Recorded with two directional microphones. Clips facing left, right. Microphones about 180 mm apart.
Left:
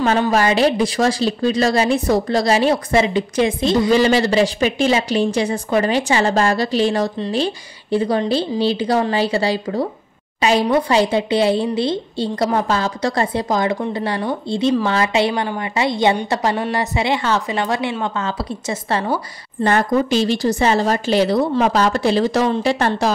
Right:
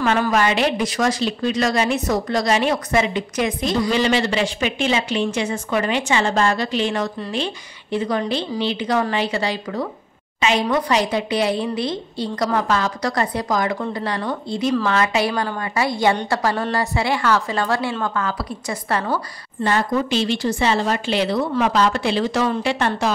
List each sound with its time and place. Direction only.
0.0 s a woman's voice: 35° left (ahead or behind)
19.6 s speech: 45° left (ahead or behind)